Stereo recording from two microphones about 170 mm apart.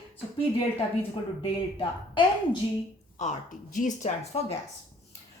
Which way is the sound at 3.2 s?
45° left (ahead or behind).